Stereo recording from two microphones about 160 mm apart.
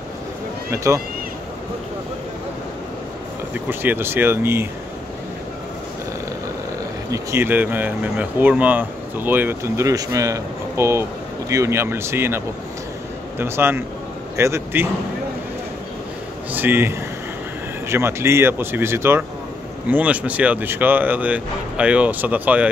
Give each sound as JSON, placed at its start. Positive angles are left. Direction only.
{"t": 0.7, "sound": "speech", "side_deg": -20}
{"t": 3.5, "sound": "speech", "side_deg": -10}
{"t": 7.1, "sound": "speech", "side_deg": -15}
{"t": 16.5, "sound": "speech", "side_deg": -15}